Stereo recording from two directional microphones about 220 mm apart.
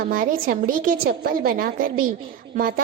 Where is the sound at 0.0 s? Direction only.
40° right (ahead or behind).